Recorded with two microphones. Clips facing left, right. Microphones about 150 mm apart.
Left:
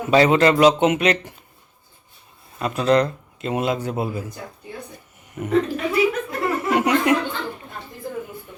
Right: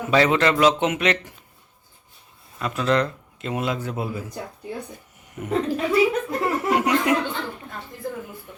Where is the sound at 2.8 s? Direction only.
35° left (ahead or behind).